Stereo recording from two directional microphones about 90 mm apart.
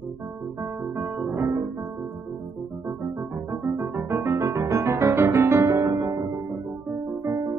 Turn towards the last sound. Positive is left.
turn(degrees=-35)  # may be behind; listen again after turning